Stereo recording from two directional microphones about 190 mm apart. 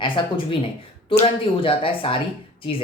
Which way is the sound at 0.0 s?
25° left (ahead or behind).